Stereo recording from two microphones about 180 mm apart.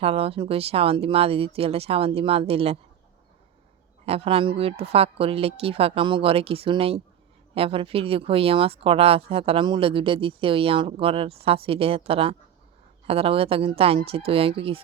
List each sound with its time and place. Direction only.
0.0 s speech: 35° right (ahead or behind)
4.0 s speech: 30° right (ahead or behind)